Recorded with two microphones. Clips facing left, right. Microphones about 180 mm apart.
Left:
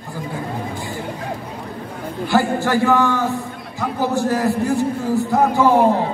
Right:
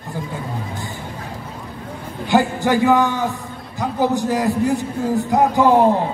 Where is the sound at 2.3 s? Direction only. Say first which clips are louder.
Right 1 dB; 20° right (ahead or behind).